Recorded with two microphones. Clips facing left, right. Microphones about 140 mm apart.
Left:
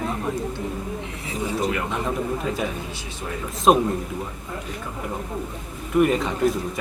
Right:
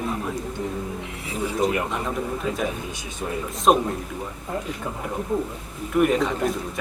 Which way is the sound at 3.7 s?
Centre (ahead or behind).